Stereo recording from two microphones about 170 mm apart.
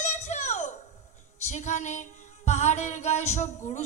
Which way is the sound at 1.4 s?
45° left (ahead or behind).